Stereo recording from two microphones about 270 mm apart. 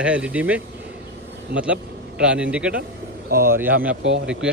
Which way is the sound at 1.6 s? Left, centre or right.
Centre.